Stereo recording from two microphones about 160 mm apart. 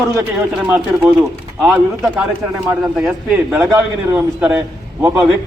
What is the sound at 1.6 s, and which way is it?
Speech, 15° right (ahead or behind).